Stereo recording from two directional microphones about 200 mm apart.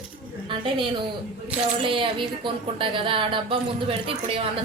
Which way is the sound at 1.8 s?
25° right (ahead or behind).